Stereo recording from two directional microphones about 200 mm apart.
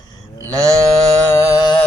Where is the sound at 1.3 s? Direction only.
20° left (ahead or behind).